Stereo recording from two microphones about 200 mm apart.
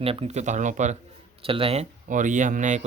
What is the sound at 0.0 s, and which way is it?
Speech, 30° right (ahead or behind).